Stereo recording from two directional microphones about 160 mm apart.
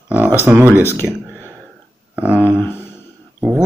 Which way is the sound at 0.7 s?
15° left (ahead or behind).